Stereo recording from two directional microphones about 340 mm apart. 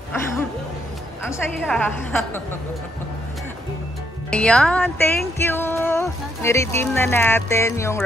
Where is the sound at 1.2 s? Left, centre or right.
Centre.